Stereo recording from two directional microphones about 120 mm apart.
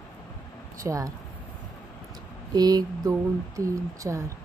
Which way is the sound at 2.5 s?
35° right (ahead or behind).